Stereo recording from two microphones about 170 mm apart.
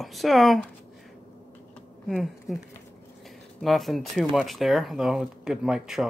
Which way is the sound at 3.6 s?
Centre (ahead or behind).